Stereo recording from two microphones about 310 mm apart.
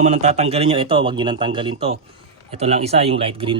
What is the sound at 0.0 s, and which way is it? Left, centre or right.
Speech, right.